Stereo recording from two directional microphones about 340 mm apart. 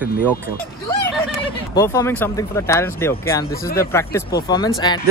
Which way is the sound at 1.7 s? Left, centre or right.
Centre.